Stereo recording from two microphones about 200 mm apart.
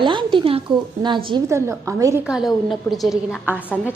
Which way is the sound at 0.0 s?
25° right (ahead or behind).